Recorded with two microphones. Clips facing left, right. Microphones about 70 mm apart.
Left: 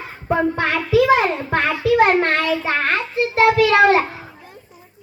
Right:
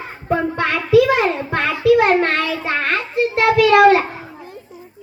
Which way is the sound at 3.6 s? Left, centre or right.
Centre.